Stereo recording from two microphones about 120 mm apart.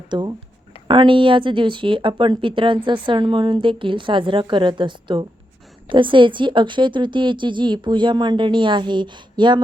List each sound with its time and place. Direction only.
0.1 s a woman's voice: 40° right (ahead or behind)